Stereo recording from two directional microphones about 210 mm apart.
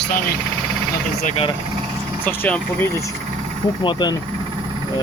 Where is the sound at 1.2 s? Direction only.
30° left (ahead or behind).